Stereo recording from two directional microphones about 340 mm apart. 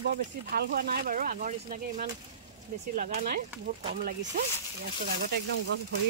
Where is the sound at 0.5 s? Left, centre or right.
Right.